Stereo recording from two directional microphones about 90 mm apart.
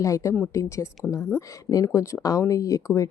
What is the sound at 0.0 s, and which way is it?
A woman's voice, 35° left (ahead or behind).